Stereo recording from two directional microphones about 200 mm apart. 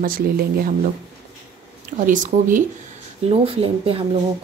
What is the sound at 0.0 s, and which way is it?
Speech, 45° right (ahead or behind).